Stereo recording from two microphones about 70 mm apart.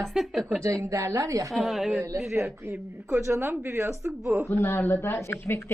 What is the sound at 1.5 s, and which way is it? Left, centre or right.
Speech, centre.